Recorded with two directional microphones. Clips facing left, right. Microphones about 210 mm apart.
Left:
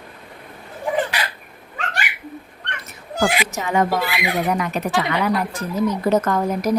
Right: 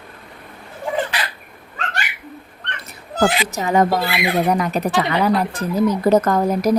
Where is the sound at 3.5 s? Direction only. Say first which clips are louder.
Right 3 dB; 35° right (ahead or behind).